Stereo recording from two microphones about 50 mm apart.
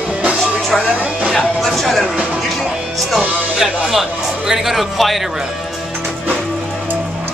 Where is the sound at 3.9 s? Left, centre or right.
Centre.